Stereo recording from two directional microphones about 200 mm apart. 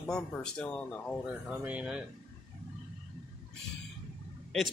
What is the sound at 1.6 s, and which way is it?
Speech, 5° right (ahead or behind).